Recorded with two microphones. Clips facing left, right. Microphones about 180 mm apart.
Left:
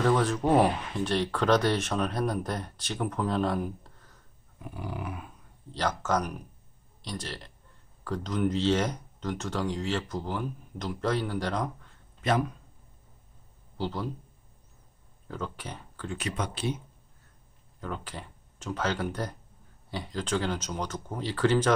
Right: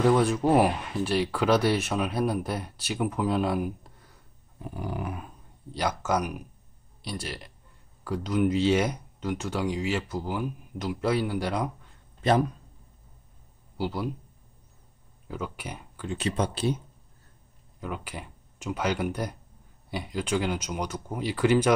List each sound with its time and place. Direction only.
0.0 s speech: 10° right (ahead or behind)
4.6 s dog: 40° right (ahead or behind)
5.7 s speech: 10° right (ahead or behind)
12.2 s speech: 35° right (ahead or behind)
13.7 s speech: 10° right (ahead or behind)
15.2 s speech: 10° right (ahead or behind)
16.2 s speech: 30° right (ahead or behind)
17.7 s speech: 10° right (ahead or behind)